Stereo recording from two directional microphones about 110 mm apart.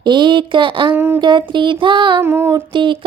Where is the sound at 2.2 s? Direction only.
20° right (ahead or behind).